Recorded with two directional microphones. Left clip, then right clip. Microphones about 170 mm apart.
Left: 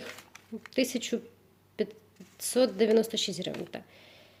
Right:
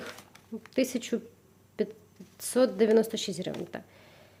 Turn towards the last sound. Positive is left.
turn(degrees=0)  # may be behind; listen again after turning